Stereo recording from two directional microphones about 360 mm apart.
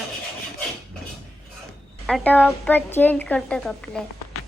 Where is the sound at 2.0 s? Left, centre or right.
Centre.